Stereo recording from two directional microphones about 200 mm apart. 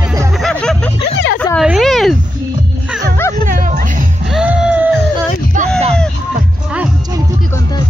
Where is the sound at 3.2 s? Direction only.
15° left (ahead or behind).